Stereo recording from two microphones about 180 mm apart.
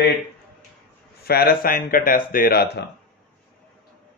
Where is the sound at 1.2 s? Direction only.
60° left (ahead or behind).